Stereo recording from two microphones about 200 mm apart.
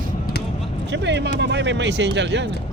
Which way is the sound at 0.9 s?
60° right (ahead or behind).